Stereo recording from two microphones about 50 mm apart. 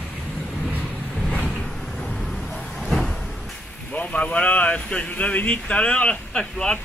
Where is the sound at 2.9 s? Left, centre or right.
Centre.